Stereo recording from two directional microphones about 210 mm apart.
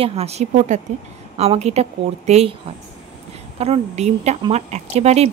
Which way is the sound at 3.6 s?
30° right (ahead or behind).